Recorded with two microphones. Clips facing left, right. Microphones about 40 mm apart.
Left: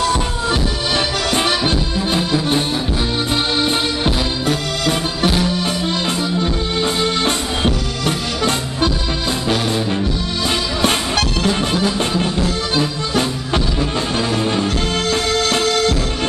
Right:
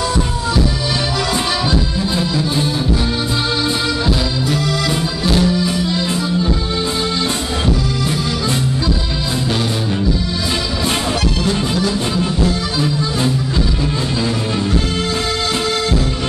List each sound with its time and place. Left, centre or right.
2.1 s accordion: left
4.0 s music: left
11.4 s music: left